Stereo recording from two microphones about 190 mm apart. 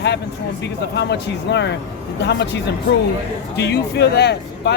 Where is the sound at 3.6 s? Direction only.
65° left (ahead or behind).